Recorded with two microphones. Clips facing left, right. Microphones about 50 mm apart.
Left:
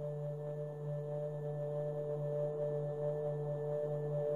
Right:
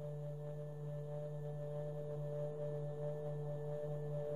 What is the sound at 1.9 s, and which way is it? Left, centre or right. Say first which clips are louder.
Singing bowl: left 6 dB; centre.